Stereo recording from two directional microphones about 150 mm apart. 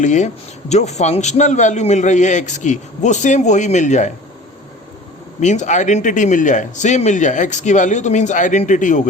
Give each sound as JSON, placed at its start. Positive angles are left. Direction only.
{"t": 0.0, "sound": "speech", "side_deg": 55}
{"t": 5.4, "sound": "speech", "side_deg": 50}